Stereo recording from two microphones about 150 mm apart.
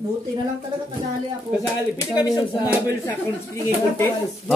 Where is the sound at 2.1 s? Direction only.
25° left (ahead or behind).